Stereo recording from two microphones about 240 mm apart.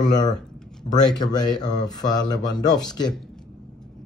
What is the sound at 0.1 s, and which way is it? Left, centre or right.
A man's voice, centre.